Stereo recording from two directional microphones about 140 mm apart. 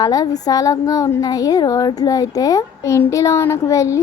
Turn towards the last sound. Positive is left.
turn(degrees=20)  # may be behind; listen again after turning